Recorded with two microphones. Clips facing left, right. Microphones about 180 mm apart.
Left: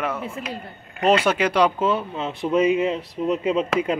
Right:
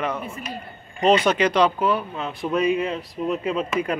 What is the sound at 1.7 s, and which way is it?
Speech, 25° left (ahead or behind).